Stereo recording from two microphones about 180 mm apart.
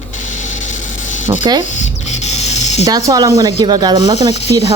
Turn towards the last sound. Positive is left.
turn(degrees=-20)  # may be behind; listen again after turning